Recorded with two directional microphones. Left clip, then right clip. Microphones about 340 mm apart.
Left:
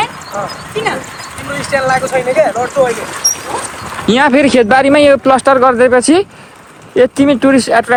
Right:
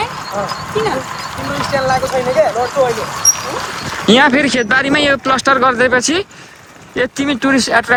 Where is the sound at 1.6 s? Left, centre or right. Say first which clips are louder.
Left 2 dB; left.